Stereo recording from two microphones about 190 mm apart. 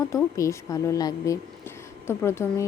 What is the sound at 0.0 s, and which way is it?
A woman's voice, 15° left (ahead or behind).